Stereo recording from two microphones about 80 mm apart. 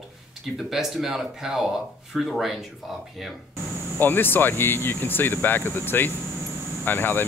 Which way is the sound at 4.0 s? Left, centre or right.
Left.